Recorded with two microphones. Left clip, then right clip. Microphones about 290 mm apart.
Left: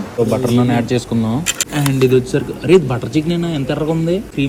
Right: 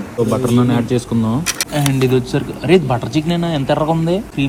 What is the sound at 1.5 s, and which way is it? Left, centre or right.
Speech, centre.